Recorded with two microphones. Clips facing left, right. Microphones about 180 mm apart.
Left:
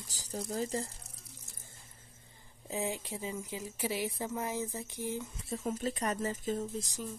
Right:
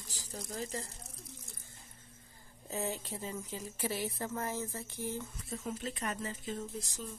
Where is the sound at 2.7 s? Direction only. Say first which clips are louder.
Left 2 dB; 15° left (ahead or behind).